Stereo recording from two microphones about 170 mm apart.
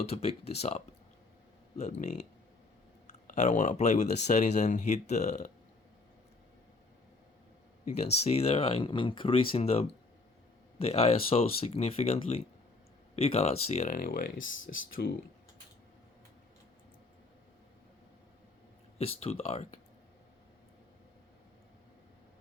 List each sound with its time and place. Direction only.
0.0 s speech: 40° left (ahead or behind)
1.8 s speech: 45° left (ahead or behind)
3.2 s speech: 45° left (ahead or behind)
7.9 s speech: 40° left (ahead or behind); by 14.5 s 60° left (ahead or behind)
18.9 s speech: 35° left (ahead or behind)